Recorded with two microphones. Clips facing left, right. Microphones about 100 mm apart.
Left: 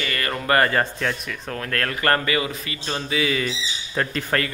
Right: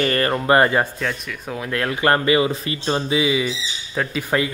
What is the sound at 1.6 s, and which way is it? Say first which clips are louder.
Speech: right 4 dB; 15° right (ahead or behind).